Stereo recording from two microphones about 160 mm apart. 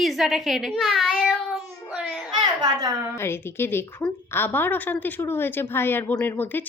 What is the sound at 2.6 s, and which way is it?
Speech, 20° right (ahead or behind).